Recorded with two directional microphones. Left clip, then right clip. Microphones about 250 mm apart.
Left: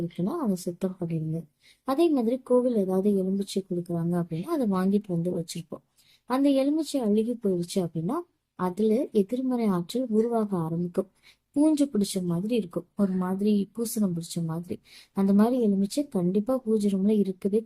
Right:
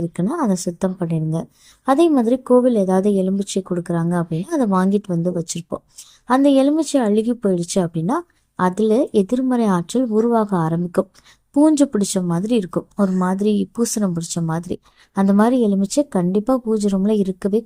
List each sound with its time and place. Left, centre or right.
0.3 s a woman's voice: right
6.2 s speech: right